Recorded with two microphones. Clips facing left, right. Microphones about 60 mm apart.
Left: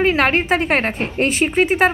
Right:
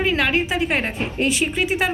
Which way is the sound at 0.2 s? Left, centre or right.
Left.